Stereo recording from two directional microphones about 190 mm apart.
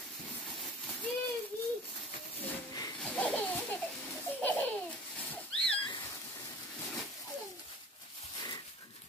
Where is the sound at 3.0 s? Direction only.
5° left (ahead or behind).